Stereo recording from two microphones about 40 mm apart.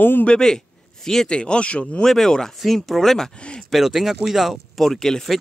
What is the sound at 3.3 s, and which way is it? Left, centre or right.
Speech, left.